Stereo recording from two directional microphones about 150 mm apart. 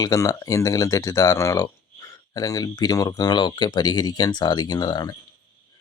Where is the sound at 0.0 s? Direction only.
25° left (ahead or behind).